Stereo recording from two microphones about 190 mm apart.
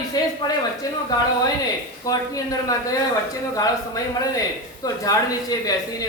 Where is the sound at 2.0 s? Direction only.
20° left (ahead or behind).